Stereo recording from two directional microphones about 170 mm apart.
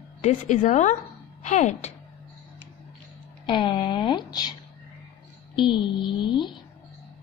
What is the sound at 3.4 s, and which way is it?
Speech, 30° left (ahead or behind).